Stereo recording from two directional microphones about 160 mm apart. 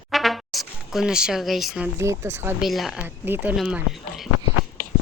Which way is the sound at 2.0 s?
20° right (ahead or behind).